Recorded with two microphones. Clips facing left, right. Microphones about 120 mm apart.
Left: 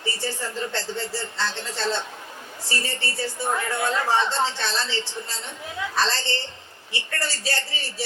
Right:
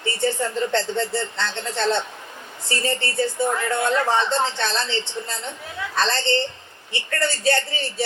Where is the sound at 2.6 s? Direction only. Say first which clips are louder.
Right 5 dB; 30° right (ahead or behind).